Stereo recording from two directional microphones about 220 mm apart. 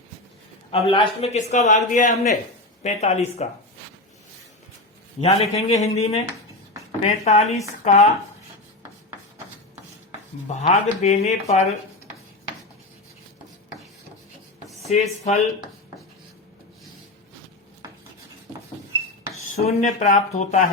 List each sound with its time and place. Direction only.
0.9 s speech: 25° left (ahead or behind)
5.2 s speech: 30° left (ahead or behind)
10.5 s speech: 30° left (ahead or behind)
14.8 s speech: 30° left (ahead or behind)
19.5 s speech: 30° left (ahead or behind)